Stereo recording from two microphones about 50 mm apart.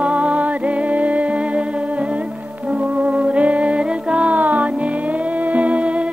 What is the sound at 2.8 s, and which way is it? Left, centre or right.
Music, right.